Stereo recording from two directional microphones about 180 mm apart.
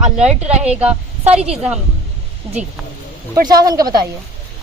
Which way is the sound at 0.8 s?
5° right (ahead or behind).